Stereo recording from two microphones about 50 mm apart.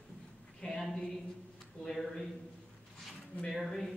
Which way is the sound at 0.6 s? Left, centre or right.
Centre.